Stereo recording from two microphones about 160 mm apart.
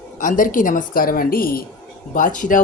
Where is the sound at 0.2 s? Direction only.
55° left (ahead or behind).